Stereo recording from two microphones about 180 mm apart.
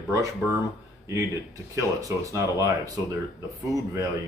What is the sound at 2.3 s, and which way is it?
Speech, 20° right (ahead or behind).